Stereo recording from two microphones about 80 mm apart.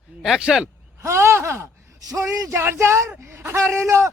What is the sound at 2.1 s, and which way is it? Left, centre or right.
Speech, right.